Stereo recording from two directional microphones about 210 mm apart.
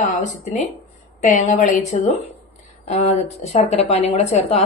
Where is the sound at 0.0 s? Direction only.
35° left (ahead or behind).